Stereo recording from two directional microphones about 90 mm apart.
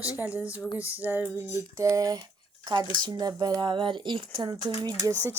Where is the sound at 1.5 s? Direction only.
35° right (ahead or behind).